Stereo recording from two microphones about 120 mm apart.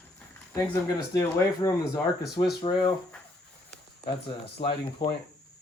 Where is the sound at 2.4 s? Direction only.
35° left (ahead or behind).